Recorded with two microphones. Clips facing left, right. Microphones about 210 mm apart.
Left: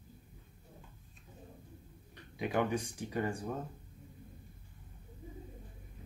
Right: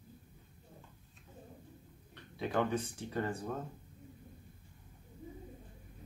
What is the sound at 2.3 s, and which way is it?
Speech, 15° left (ahead or behind).